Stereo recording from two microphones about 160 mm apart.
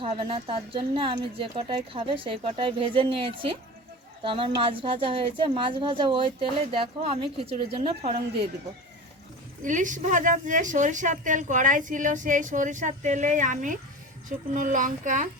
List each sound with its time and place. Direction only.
0.0 s speech: 35° right (ahead or behind)
9.6 s a woman's voice: 55° right (ahead or behind)